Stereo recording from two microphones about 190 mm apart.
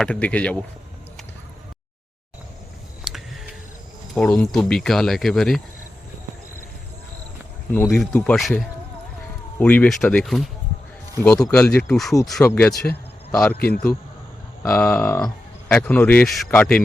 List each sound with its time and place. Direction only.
0.0 s speech: 5° left (ahead or behind)
3.0 s a sound: 5° right (ahead or behind)
4.1 s speech: 5° left (ahead or behind)
7.7 s speech: 5° left (ahead or behind)
9.6 s speech: 5° left (ahead or behind)
11.2 s speech: 15° left (ahead or behind)
13.6 s a man's voice: 55° left (ahead or behind)
14.6 s speech: 10° left (ahead or behind)